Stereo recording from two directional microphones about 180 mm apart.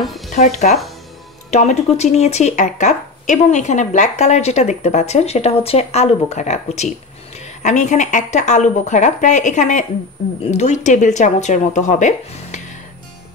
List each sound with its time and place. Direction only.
0.3 s speech: 40° left (ahead or behind)